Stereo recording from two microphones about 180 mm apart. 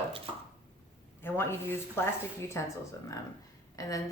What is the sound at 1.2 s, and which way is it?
Speech, 10° left (ahead or behind).